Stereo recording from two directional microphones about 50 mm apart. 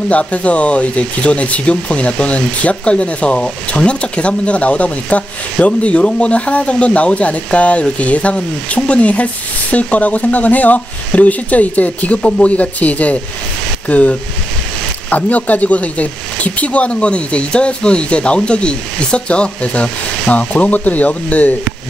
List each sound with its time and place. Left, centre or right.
0.1 s speech: left